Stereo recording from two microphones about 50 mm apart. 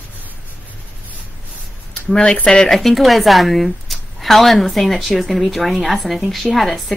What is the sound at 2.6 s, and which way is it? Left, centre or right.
A woman's voice, centre.